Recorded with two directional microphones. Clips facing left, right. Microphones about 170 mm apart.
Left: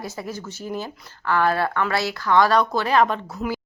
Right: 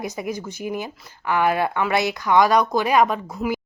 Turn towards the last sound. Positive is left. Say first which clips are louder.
# right 2 dB
turn(degrees=-10)  # may be behind; listen again after turning